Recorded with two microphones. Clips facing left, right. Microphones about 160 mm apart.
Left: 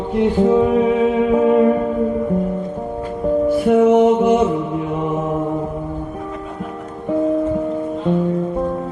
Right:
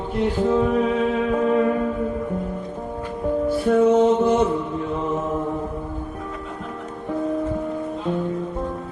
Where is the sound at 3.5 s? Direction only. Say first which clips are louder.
Left 3 dB; 15° left (ahead or behind).